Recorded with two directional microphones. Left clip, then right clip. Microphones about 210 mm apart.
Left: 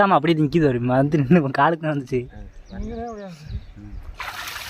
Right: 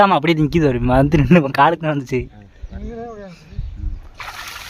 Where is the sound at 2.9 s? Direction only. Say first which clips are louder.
Right 1 dB; centre (ahead or behind).